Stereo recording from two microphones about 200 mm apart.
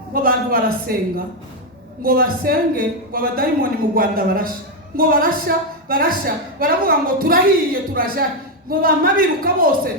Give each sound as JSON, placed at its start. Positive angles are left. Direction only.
{"t": 0.1, "sound": "a man's voice", "side_deg": -45}